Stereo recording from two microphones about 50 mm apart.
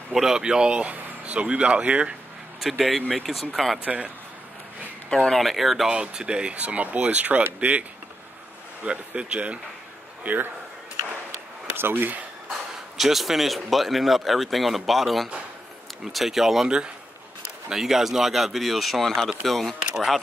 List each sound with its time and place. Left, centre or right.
0.1 s speech: centre
0.7 s speech: right
2.6 s speech: centre
3.8 s speech: right
5.1 s speech: centre
5.9 s speech: centre
6.6 s speech: right
8.8 s speech: right
10.2 s a man's voice: right
11.7 s speech: right
12.9 s speech: centre